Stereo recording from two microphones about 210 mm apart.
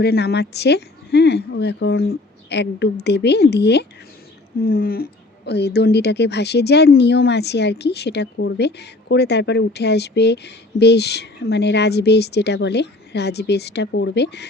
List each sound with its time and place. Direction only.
0.0 s speech: 50° left (ahead or behind)